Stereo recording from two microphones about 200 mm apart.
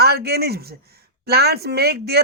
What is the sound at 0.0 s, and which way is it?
Speech, 50° right (ahead or behind).